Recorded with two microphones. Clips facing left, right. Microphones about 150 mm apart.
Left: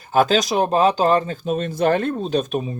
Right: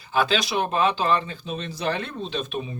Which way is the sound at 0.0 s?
45° left (ahead or behind).